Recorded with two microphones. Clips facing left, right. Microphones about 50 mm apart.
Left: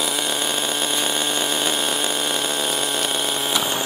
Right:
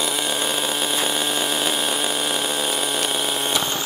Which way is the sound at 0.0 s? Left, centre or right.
Centre.